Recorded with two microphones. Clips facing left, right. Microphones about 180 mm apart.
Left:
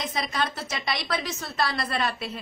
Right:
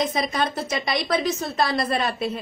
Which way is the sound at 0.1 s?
20° right (ahead or behind).